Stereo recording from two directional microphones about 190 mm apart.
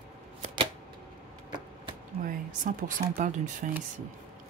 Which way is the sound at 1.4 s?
25° right (ahead or behind).